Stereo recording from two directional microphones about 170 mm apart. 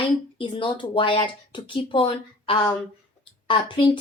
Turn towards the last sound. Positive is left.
turn(degrees=30)  # may be behind; listen again after turning